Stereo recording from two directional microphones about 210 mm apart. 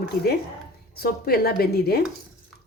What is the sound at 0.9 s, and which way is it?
A woman's voice, 45° left (ahead or behind).